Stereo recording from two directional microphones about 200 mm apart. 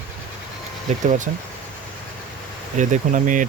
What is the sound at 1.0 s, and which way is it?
Speech, 35° right (ahead or behind).